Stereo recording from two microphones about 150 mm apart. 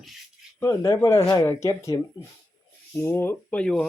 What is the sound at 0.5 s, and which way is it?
Speech, 20° left (ahead or behind).